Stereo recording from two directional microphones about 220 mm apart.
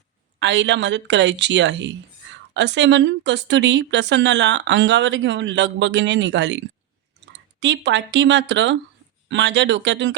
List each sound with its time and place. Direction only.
0.3 s a woman's voice: 55° right (ahead or behind)